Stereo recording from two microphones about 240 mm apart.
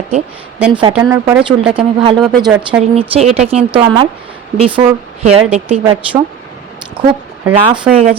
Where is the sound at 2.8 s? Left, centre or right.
Right.